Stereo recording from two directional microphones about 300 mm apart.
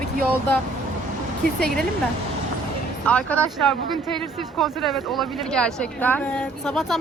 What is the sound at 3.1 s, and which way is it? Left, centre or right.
Speech, centre.